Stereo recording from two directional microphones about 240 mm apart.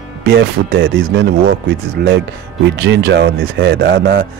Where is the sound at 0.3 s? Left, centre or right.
Right.